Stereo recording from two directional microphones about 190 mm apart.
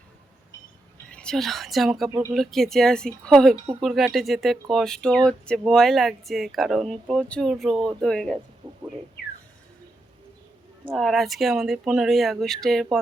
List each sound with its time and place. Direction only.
1.1 s speech: 5° left (ahead or behind)
8.6 s a sound: 25° right (ahead or behind)
10.9 s speech: centre (ahead or behind)